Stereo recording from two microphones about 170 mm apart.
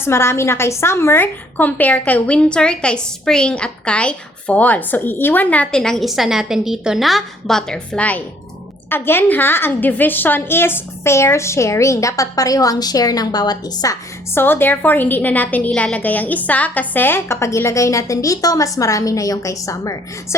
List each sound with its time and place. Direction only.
0.0 s a woman's voice: 15° left (ahead or behind)
14.3 s a woman's voice: 15° left (ahead or behind)